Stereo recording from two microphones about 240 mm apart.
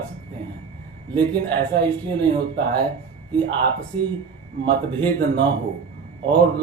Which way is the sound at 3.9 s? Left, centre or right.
Right.